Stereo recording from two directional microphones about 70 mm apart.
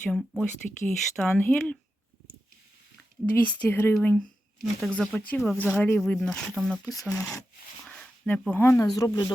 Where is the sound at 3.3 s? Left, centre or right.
Left.